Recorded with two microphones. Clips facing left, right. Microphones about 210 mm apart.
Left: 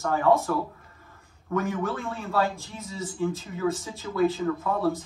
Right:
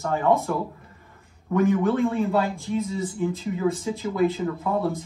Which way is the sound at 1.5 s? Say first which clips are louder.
Right 7 dB; 15° right (ahead or behind).